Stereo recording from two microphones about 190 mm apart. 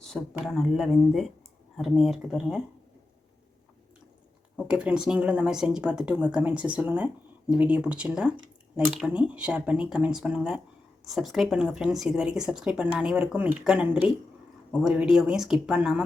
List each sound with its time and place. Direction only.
0.3 s a woman's voice: centre (ahead or behind)
4.5 s a woman's voice: 5° right (ahead or behind)